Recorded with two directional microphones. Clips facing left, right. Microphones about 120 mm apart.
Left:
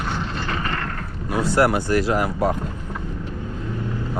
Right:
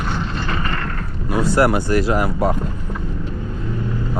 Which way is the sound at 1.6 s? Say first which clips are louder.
Right 1 dB; 10° right (ahead or behind).